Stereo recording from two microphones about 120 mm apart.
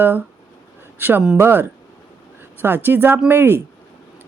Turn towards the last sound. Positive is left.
turn(degrees=-20)  # may be behind; listen again after turning